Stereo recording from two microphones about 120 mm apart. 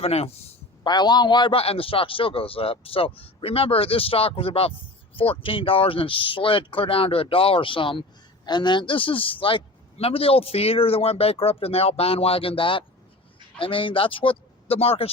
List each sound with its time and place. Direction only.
0.0 s speech: 55° left (ahead or behind)
0.9 s a man's voice: 35° left (ahead or behind); by 15.1 s 55° left (ahead or behind)